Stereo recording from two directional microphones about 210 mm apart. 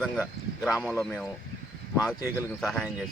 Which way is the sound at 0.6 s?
5° right (ahead or behind).